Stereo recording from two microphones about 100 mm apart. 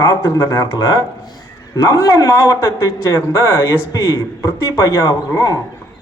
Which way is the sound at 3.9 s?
45° left (ahead or behind).